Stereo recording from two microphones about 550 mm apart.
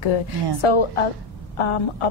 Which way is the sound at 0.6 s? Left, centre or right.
Left.